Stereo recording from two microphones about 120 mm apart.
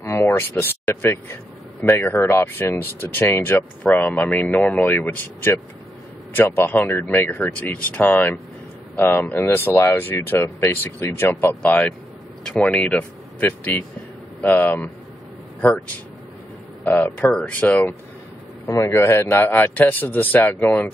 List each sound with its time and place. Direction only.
0.0 s speech: 20° left (ahead or behind)
12.4 s speech: 5° left (ahead or behind)
16.8 s speech: 15° left (ahead or behind)